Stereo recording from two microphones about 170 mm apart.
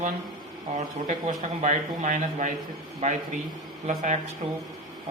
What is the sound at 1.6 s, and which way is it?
Speech, 45° right (ahead or behind).